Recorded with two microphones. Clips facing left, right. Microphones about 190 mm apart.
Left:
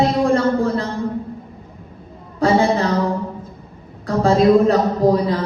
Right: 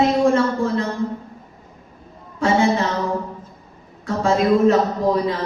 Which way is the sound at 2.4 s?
35° left (ahead or behind).